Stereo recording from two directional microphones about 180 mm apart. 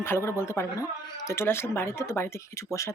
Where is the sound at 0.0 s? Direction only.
15° left (ahead or behind).